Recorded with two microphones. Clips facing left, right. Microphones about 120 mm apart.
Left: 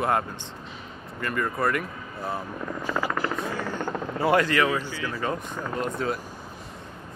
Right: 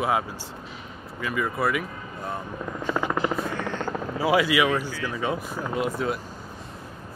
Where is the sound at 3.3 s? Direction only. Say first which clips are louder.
Right 1 dB; centre (ahead or behind).